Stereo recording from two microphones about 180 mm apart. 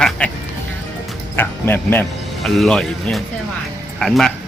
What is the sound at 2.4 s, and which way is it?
Speech, centre (ahead or behind).